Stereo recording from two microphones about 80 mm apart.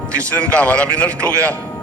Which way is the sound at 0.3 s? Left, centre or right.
Centre.